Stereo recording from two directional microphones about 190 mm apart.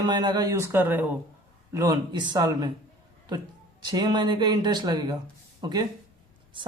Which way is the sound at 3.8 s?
20° right (ahead or behind).